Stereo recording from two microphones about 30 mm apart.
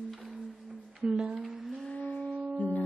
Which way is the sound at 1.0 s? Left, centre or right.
Right.